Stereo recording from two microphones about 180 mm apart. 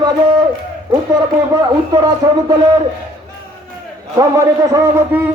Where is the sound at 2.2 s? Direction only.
20° right (ahead or behind).